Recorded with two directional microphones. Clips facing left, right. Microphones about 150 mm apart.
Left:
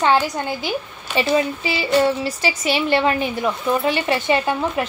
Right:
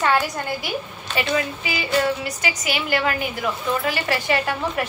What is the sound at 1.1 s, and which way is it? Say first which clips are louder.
A woman's voice: left 5 dB; 30° left (ahead or behind).